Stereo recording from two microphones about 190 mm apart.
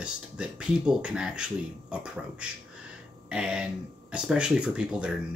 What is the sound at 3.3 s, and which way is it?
Speech, 5° right (ahead or behind).